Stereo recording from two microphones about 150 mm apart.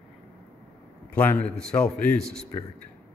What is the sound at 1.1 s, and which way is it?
A man's voice, 10° left (ahead or behind).